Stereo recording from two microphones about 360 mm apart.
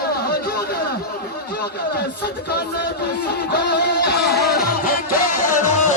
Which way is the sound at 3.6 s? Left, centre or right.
Left.